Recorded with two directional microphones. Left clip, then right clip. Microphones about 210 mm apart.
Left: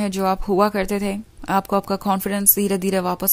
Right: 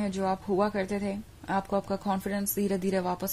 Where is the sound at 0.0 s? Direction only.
40° left (ahead or behind).